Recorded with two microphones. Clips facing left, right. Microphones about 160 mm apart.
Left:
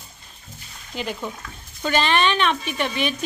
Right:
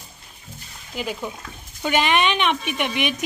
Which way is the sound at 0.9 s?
5° right (ahead or behind).